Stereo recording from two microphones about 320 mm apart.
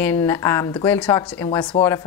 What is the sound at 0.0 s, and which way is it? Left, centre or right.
Speech, centre.